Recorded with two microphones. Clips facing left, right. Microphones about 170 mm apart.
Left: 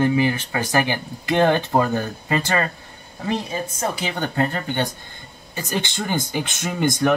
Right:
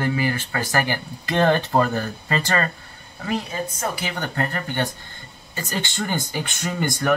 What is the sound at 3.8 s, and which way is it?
Speech, 20° left (ahead or behind).